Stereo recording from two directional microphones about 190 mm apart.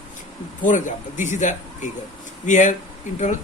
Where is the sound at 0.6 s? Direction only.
40° left (ahead or behind).